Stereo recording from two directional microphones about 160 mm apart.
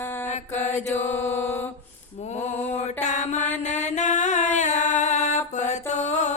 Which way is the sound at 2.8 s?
45° left (ahead or behind).